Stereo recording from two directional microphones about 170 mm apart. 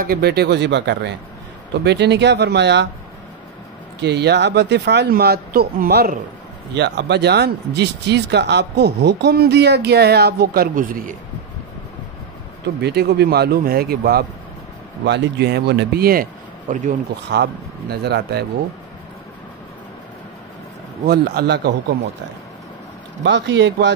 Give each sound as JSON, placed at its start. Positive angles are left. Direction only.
{"t": 0.0, "sound": "speech", "side_deg": -65}
{"t": 4.0, "sound": "speech", "side_deg": -85}
{"t": 6.7, "sound": "speech", "side_deg": -85}
{"t": 12.8, "sound": "speech", "side_deg": -70}
{"t": 15.0, "sound": "speech", "side_deg": -85}
{"t": 17.3, "sound": "speech", "side_deg": -75}
{"t": 21.1, "sound": "speech", "side_deg": -65}
{"t": 23.2, "sound": "speech", "side_deg": -90}